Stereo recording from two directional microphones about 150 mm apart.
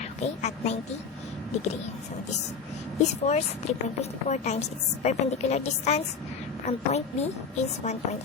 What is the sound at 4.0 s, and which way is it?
A woman's voice, 50° left (ahead or behind).